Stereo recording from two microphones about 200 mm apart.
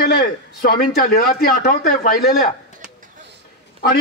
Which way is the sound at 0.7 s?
45° left (ahead or behind).